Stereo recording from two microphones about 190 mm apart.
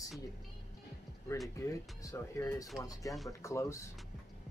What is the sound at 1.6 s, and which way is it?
Speech, 15° left (ahead or behind).